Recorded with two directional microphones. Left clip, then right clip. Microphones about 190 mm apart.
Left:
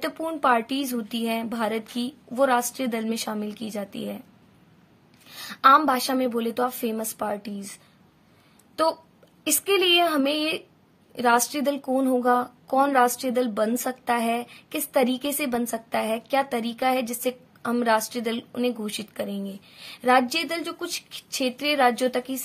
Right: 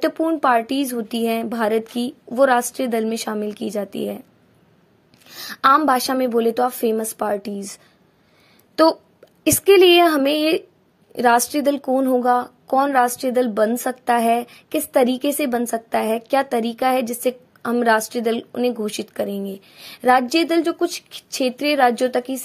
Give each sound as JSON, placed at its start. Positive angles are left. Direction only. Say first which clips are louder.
{"t": 0.0, "sound": "speech", "louder": "right 6 dB", "side_deg": -30}
{"t": 5.3, "sound": "speech", "louder": "right 2 dB", "side_deg": -35}